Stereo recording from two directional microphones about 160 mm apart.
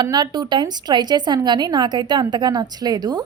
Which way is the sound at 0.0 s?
25° right (ahead or behind).